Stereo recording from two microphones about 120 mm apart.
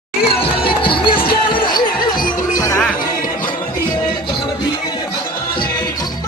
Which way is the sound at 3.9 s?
40° left (ahead or behind).